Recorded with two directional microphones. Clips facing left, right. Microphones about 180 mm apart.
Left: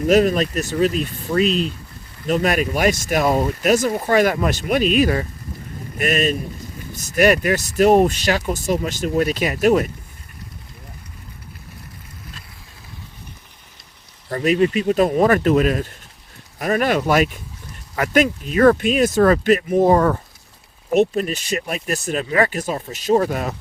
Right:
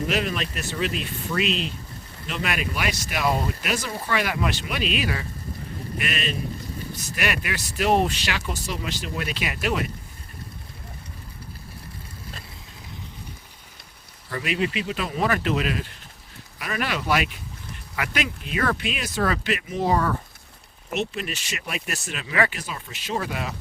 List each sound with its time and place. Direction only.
0.1 s speech: 45° left (ahead or behind)
14.3 s speech: 40° left (ahead or behind)